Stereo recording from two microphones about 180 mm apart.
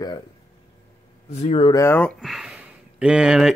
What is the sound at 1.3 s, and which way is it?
Speech, 35° left (ahead or behind).